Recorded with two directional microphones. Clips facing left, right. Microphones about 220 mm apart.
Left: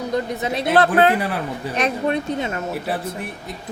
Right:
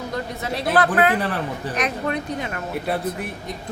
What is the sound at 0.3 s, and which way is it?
Speech, 20° left (ahead or behind).